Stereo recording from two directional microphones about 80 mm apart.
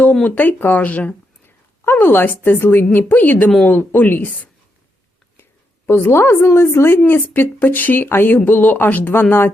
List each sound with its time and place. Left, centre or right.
0.0 s speech: centre
1.8 s speech: left
5.4 s a woman's voice: left